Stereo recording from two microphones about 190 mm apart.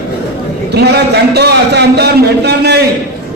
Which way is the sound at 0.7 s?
60° right (ahead or behind).